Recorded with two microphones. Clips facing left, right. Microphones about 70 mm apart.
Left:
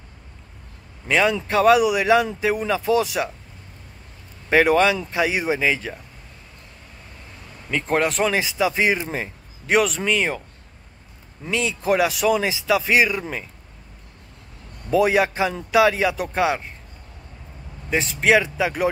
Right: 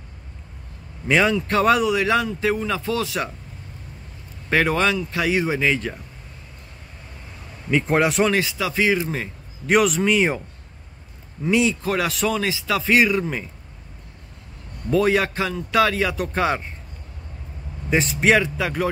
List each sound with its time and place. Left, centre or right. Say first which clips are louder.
1.0 s a man's voice: right 1 dB; centre
4.5 s speech: left 3 dB; centre
7.7 s speech: right 2 dB; centre
8.4 s speech: left 1 dB; centre
9.7 s speech: right 2 dB; centre
11.4 s speech: right 5 dB; centre
11.8 s speech: left 3 dB; centre
14.9 s speech: left 1 dB; centre
17.8 s speech: right 1 dB; centre
18.4 s speech: left 1 dB; centre